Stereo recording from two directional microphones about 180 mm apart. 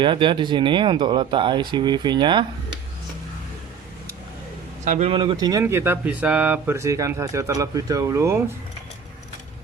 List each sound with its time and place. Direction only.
0.0 s speech: 25° right (ahead or behind)
4.9 s speech: 35° right (ahead or behind); by 8.4 s 15° right (ahead or behind)